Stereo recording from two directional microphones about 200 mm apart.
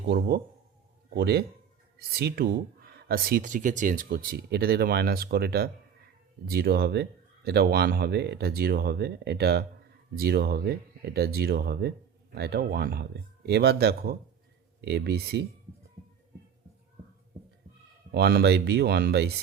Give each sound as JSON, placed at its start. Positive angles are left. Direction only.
{"t": 0.1, "sound": "speech", "side_deg": -50}
{"t": 18.1, "sound": "speech", "side_deg": -55}